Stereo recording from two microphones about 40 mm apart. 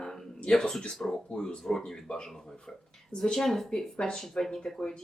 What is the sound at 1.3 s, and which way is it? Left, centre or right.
Speech, left.